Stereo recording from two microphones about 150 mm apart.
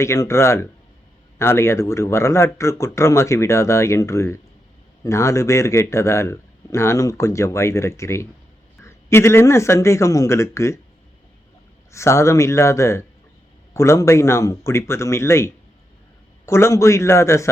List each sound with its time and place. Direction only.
0.0 s a man's voice: 20° left (ahead or behind)
11.9 s a man's voice: 20° left (ahead or behind)